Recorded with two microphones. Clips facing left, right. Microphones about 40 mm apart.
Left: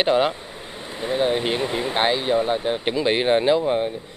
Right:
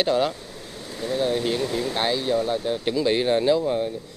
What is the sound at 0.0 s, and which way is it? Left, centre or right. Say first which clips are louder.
Speech: left 3 dB; left.